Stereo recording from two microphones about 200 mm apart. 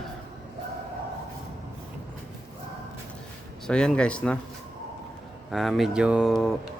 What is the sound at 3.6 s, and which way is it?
Speech, 5° left (ahead or behind).